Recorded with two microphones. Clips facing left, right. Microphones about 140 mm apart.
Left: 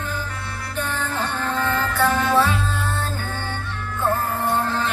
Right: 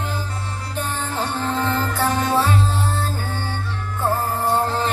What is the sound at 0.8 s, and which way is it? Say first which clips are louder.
Music: even; 35° right (ahead or behind).